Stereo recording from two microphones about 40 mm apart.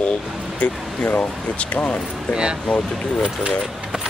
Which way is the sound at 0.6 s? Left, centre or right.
Left.